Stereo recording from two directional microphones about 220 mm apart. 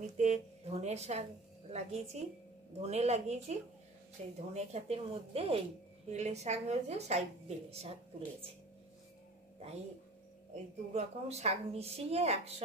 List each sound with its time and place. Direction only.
0.2 s a woman's voice: 30° right (ahead or behind)
10.5 s a woman's voice: 30° right (ahead or behind)